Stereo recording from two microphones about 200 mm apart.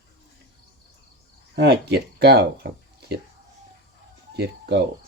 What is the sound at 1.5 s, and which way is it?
Speech, 55° right (ahead or behind).